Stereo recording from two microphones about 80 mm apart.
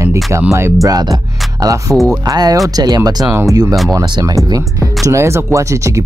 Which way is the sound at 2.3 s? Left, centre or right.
Right.